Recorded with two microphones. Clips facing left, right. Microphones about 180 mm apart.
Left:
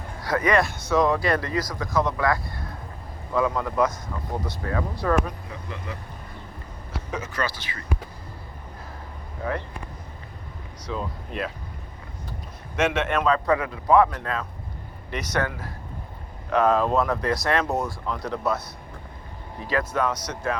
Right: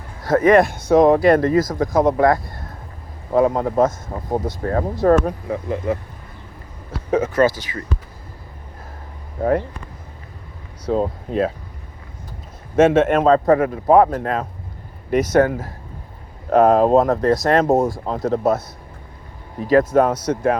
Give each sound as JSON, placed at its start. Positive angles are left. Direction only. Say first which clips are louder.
{"t": 0.2, "sound": "speech", "louder": "right 9 dB", "side_deg": -50}
{"t": 7.1, "sound": "speech", "louder": "right 14 dB", "side_deg": -50}
{"t": 10.8, "sound": "speech", "louder": "right 11 dB", "side_deg": -45}
{"t": 12.7, "sound": "speech", "louder": "right 10 dB", "side_deg": -50}
{"t": 19.6, "sound": "speech", "louder": "right 10 dB", "side_deg": -45}